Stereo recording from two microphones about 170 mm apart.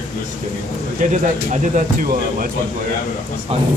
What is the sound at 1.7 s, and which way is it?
Speech, 55° right (ahead or behind).